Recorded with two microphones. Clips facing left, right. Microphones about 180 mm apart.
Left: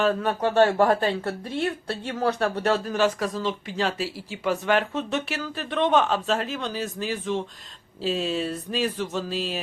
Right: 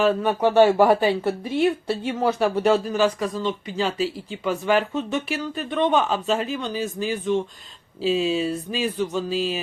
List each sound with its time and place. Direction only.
0.0 s speech: 5° right (ahead or behind)